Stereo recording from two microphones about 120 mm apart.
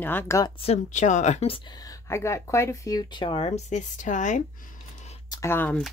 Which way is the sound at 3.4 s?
70° left (ahead or behind).